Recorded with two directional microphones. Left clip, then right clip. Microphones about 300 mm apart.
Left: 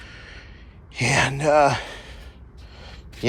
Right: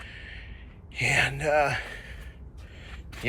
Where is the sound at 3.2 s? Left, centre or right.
Left.